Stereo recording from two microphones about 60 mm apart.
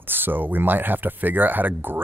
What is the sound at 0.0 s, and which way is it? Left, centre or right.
Speech, right.